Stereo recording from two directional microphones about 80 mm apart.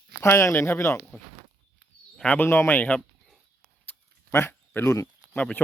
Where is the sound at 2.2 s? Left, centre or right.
Centre.